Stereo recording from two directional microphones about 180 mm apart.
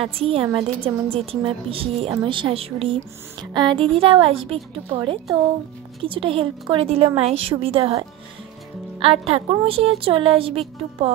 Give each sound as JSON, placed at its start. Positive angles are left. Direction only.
{"t": 0.0, "sound": "a woman's voice", "side_deg": -30}
{"t": 9.0, "sound": "a woman's voice", "side_deg": -30}